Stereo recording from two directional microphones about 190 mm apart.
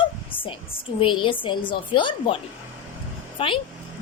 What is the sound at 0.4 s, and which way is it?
A woman's voice, 25° left (ahead or behind).